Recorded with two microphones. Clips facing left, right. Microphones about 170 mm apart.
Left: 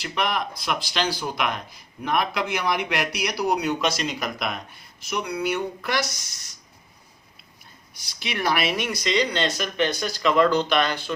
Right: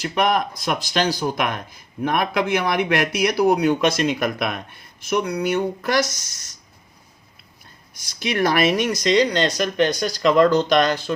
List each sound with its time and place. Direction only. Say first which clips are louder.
0.0 s speech: right 6 dB; 45° right (ahead or behind)
8.2 s speech: right 6 dB; 50° right (ahead or behind)